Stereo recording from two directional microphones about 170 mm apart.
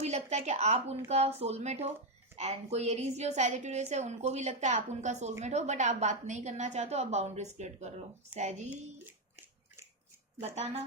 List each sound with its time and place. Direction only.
0.0 s a woman's voice: 40° right (ahead or behind)
10.4 s a woman's voice: 40° right (ahead or behind)